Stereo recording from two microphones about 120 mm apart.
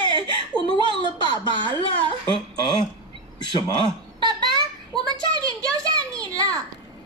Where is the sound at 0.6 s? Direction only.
45° right (ahead or behind).